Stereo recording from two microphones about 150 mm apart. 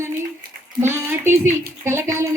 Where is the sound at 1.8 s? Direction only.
20° right (ahead or behind).